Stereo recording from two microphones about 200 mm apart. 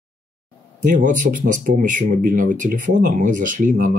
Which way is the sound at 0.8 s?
40° right (ahead or behind).